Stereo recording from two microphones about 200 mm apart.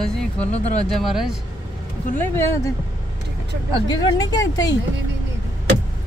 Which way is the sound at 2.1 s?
10° left (ahead or behind).